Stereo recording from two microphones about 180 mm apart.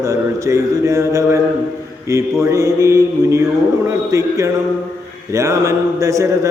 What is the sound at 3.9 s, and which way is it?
Speech, 15° right (ahead or behind).